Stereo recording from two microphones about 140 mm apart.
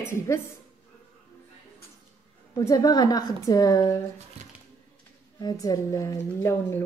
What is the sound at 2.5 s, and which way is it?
A woman's voice, 25° left (ahead or behind).